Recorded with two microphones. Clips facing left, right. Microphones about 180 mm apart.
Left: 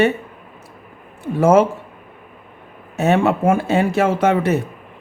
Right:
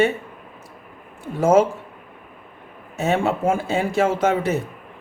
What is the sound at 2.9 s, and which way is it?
Speech, 65° left (ahead or behind).